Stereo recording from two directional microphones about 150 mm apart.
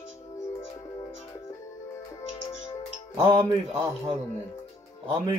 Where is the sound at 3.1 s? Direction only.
25° right (ahead or behind).